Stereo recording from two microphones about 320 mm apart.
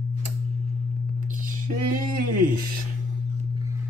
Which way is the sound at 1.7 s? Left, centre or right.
Right.